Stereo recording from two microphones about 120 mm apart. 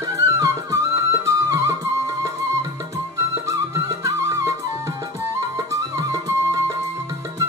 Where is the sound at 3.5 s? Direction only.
25° right (ahead or behind).